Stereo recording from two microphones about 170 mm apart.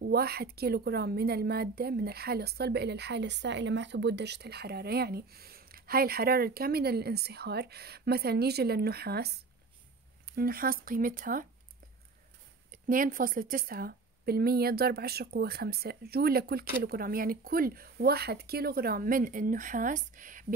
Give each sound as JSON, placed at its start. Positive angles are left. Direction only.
{"t": 0.0, "sound": "a woman's voice", "side_deg": -70}
{"t": 12.7, "sound": "a woman's voice", "side_deg": -50}